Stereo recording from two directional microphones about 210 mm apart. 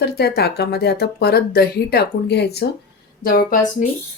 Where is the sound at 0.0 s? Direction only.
50° left (ahead or behind).